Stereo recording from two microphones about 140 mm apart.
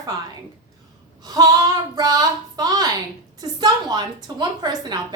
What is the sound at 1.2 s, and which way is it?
Speech, 25° right (ahead or behind).